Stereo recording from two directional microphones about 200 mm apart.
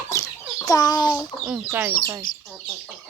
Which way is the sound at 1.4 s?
5° right (ahead or behind).